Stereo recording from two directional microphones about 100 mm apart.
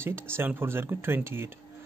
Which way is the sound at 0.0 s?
25° right (ahead or behind).